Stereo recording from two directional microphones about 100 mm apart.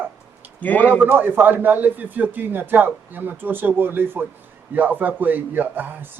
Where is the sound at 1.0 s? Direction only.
20° right (ahead or behind).